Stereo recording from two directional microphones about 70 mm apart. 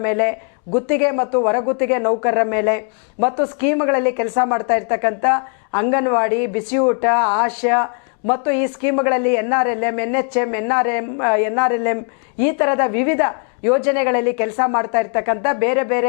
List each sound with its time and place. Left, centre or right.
0.0 s speech: left